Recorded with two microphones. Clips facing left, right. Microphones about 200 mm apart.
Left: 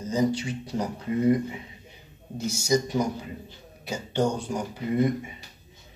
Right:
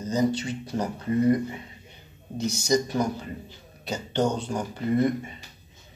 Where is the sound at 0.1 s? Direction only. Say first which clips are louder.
Even; 10° left (ahead or behind).